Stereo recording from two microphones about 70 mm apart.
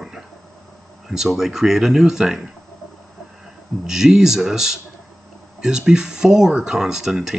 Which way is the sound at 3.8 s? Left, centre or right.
Centre.